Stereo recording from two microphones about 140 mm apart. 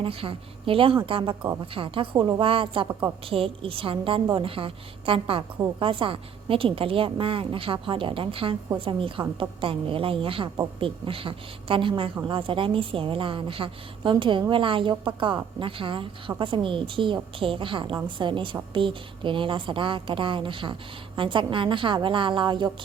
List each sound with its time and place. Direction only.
0.0 s a woman's voice: 40° right (ahead or behind)